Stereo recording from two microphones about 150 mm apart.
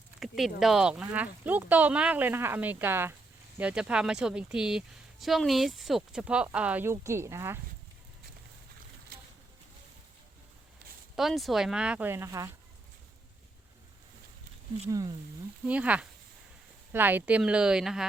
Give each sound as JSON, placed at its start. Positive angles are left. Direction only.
{"t": 0.2, "sound": "speech", "side_deg": 0}
{"t": 11.2, "sound": "speech", "side_deg": 0}
{"t": 14.8, "sound": "speech", "side_deg": -25}
{"t": 15.6, "sound": "speech", "side_deg": -10}